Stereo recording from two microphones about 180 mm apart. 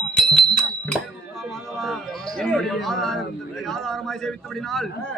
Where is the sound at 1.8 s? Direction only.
Centre (ahead or behind).